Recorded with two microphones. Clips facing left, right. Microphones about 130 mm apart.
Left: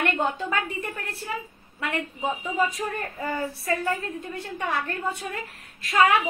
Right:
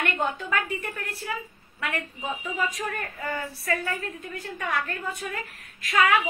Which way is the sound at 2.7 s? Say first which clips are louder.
Left 2 dB; 25° left (ahead or behind).